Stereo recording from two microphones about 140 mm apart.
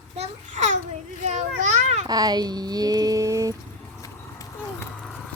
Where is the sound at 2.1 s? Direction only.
30° right (ahead or behind).